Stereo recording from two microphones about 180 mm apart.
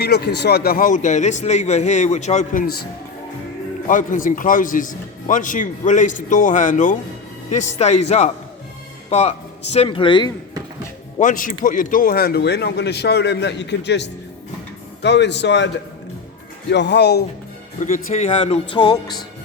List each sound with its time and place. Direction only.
0.0 s speech: 65° left (ahead or behind); by 2.6 s 45° left (ahead or behind)
3.8 s speech: 45° left (ahead or behind); by 10.3 s 25° left (ahead or behind)
11.2 s a man's voice: 50° left (ahead or behind); by 17.2 s 65° left (ahead or behind)
17.8 s speech: 40° left (ahead or behind)
18.7 s speech: 25° left (ahead or behind)